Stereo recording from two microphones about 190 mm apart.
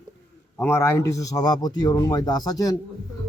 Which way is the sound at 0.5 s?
10° left (ahead or behind).